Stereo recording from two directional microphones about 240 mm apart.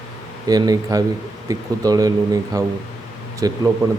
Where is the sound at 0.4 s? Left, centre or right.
Centre.